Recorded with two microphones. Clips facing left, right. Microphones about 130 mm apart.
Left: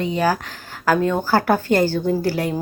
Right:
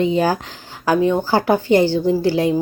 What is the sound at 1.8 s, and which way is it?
Speech, 45° left (ahead or behind).